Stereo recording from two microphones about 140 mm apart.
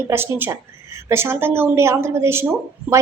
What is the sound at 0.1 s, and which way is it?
A woman's voice, 15° right (ahead or behind).